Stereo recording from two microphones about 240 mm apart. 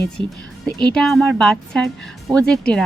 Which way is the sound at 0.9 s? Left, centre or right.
Centre.